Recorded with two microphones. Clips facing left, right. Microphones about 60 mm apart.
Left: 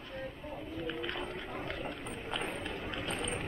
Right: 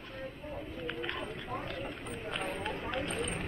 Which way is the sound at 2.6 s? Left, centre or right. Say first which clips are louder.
Right 3 dB; right.